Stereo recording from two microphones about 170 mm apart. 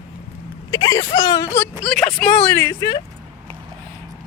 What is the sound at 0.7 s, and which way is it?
Speech, 20° left (ahead or behind).